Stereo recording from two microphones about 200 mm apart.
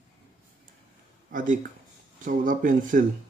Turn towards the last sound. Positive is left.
turn(degrees=-40)  # may be behind; listen again after turning